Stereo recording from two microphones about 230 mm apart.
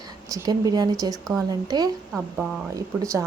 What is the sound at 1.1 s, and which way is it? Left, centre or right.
Speech, centre.